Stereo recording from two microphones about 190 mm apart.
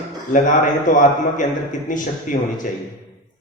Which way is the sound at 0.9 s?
45° left (ahead or behind).